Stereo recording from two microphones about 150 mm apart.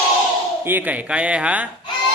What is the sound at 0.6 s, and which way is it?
Speech, 15° right (ahead or behind).